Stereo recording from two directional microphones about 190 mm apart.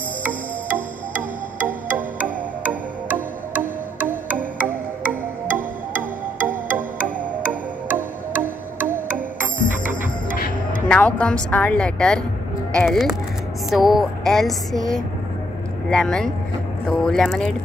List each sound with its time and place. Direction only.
1.6 s music: 10° right (ahead or behind)
10.3 s music: 50° left (ahead or behind)
10.9 s a woman's voice: 5° left (ahead or behind)